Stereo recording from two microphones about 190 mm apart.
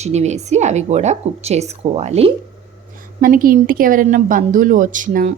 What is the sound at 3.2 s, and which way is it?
A woman's voice, 50° right (ahead or behind).